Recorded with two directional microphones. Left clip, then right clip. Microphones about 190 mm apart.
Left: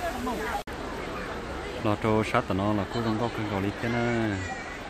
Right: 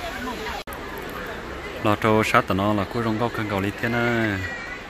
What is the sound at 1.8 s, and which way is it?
Speech, 5° right (ahead or behind).